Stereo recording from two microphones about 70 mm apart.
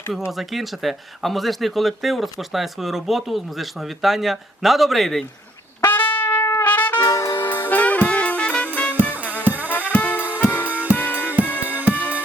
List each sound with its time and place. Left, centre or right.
0.3 s speech: centre
5.8 s trumpet: left
6.4 s trumpet: left
6.7 s music: left
7.2 s music: left
9.2 s music: right
9.6 s music: left
10.7 s music: right
10.9 s music: left
11.7 s music: right